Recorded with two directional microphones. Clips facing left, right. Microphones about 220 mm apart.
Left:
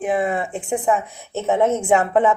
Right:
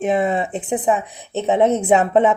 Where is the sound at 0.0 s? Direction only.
25° right (ahead or behind).